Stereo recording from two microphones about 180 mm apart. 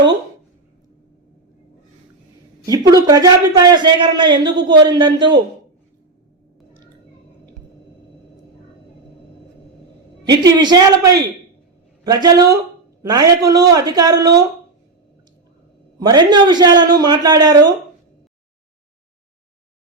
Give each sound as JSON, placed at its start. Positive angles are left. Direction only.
{"t": 2.6, "sound": "a man's voice", "side_deg": -20}
{"t": 10.6, "sound": "a man's voice", "side_deg": -20}
{"t": 16.0, "sound": "a man's voice", "side_deg": -25}